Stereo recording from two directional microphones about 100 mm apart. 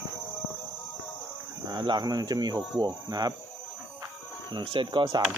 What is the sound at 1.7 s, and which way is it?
Speech, 45° right (ahead or behind).